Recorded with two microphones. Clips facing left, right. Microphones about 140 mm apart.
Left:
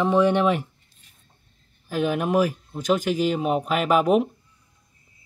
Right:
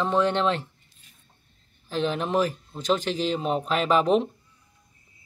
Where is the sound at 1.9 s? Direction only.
10° left (ahead or behind).